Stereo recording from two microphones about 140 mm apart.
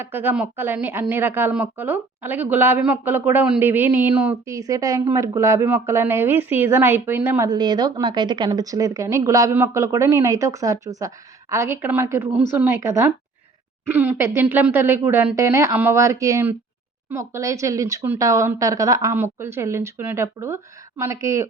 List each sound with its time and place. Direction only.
0.0 s a woman's voice: 15° right (ahead or behind)
4.4 s a woman's voice: 25° right (ahead or behind)